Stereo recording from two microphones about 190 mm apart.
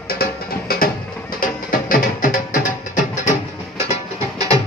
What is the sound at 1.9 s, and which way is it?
Music, 45° left (ahead or behind).